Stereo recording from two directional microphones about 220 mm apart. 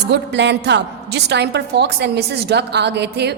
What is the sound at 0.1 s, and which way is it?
A woman's voice, 50° right (ahead or behind).